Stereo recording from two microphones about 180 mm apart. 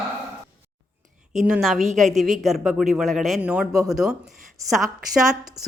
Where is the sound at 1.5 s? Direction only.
Centre (ahead or behind).